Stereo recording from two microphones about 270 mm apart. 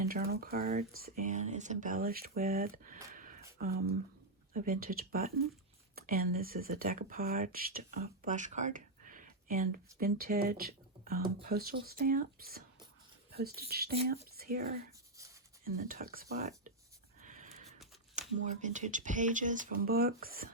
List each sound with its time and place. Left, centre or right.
0.1 s speech: right
17.2 s a sound: right
18.1 s speech: right